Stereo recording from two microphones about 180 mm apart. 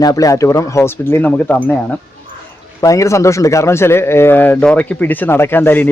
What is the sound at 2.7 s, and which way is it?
Speech, 20° left (ahead or behind).